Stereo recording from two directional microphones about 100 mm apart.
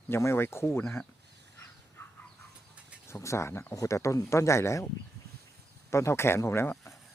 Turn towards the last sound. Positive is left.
turn(degrees=25)  # may be behind; listen again after turning